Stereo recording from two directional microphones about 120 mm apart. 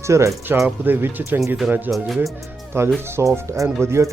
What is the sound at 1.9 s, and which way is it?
Speech, centre (ahead or behind).